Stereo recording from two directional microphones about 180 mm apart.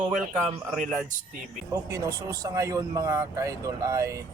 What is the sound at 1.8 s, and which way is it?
Speech, 20° right (ahead or behind).